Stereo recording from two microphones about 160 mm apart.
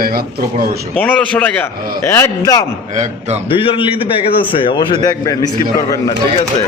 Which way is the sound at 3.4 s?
35° left (ahead or behind).